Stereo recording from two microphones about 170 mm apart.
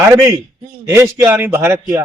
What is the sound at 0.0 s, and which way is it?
Speech, 20° right (ahead or behind).